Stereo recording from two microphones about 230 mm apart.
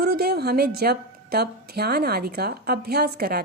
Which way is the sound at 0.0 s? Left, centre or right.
Right.